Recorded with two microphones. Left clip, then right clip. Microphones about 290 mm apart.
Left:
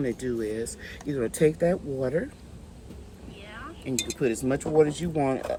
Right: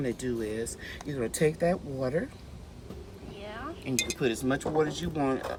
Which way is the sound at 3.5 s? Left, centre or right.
Centre.